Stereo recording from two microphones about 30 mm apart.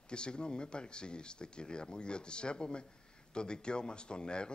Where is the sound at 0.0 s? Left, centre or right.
Left.